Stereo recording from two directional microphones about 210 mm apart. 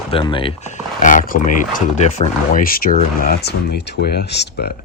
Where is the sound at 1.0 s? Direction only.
40° left (ahead or behind).